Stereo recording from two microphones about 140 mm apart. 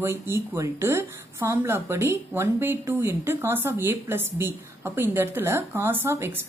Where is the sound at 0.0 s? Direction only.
20° right (ahead or behind).